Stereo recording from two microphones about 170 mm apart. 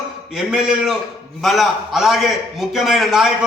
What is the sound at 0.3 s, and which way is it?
A man's voice, 5° right (ahead or behind).